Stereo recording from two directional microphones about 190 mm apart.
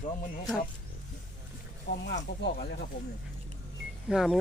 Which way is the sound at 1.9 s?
50° left (ahead or behind).